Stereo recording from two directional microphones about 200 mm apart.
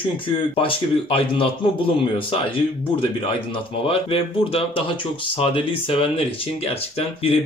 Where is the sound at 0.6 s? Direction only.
25° left (ahead or behind).